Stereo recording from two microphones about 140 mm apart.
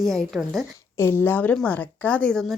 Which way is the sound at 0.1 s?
Centre (ahead or behind).